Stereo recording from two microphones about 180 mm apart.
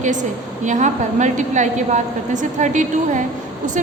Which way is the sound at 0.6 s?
45° right (ahead or behind).